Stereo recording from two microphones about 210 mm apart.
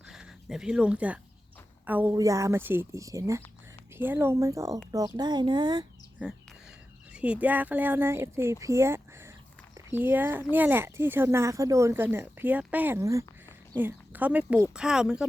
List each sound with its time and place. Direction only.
0.1 s speech: centre (ahead or behind); by 5.8 s 20° right (ahead or behind)
7.1 s speech: 5° right (ahead or behind)